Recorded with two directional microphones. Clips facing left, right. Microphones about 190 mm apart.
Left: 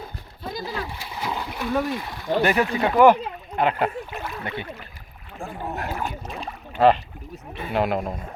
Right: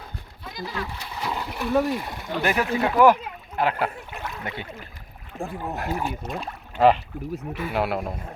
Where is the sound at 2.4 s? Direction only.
5° right (ahead or behind).